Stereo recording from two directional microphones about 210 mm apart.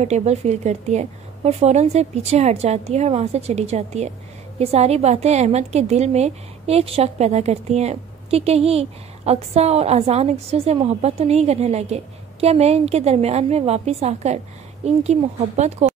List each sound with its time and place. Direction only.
0.0 s a woman's voice: 30° right (ahead or behind)